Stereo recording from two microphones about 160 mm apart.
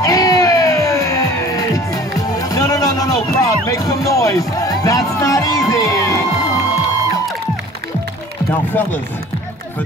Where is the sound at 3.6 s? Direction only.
20° left (ahead or behind).